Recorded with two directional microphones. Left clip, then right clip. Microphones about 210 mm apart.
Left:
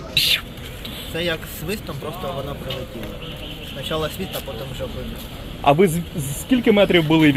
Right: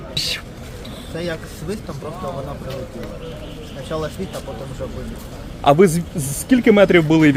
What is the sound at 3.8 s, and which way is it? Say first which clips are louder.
Speech: left 1 dB; centre (ahead or behind).